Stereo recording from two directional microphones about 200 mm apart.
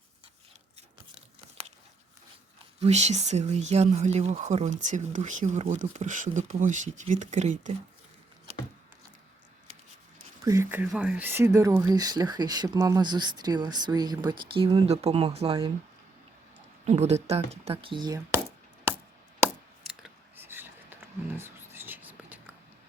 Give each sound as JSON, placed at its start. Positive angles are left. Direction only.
{"t": 2.8, "sound": "speech", "side_deg": -35}
{"t": 10.4, "sound": "speech", "side_deg": -15}
{"t": 16.8, "sound": "speech", "side_deg": -35}
{"t": 19.9, "sound": "a sound", "side_deg": -5}